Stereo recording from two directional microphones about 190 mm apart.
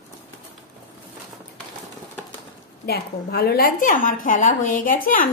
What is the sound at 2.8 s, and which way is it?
A woman's voice, 55° left (ahead or behind).